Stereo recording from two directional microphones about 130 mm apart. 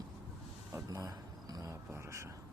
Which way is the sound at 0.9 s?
25° right (ahead or behind).